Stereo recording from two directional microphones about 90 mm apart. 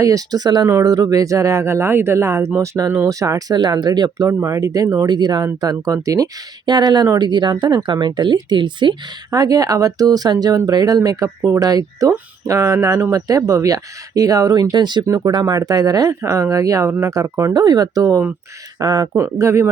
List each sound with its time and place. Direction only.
0.0 s speech: 45° right (ahead or behind)
4.3 s speech: 35° right (ahead or behind); by 9.0 s 60° right (ahead or behind)
9.3 s speech: 45° right (ahead or behind)
15.0 s speech: 40° right (ahead or behind)
17.5 s speech: 45° right (ahead or behind)
19.2 s speech: 35° right (ahead or behind)